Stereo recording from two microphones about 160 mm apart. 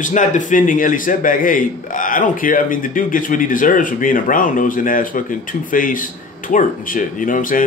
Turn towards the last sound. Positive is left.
turn(degrees=55)  # may be behind; listen again after turning